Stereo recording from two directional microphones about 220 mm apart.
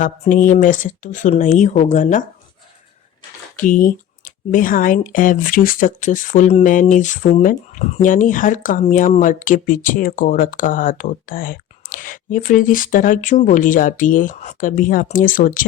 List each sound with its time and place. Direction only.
0.0 s speech: 35° left (ahead or behind)
3.6 s speech: 35° left (ahead or behind)